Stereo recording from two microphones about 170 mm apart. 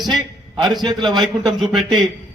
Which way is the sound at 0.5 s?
25° right (ahead or behind).